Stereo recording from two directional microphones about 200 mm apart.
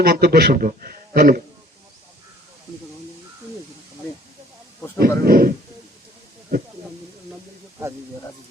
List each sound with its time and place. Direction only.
0.0 s a man's voice: 50° right (ahead or behind)
4.9 s a man's voice: 50° right (ahead or behind)